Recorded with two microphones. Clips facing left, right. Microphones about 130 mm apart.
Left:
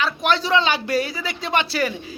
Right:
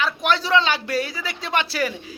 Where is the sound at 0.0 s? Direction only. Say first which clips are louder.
Left 1 dB; 10° right (ahead or behind).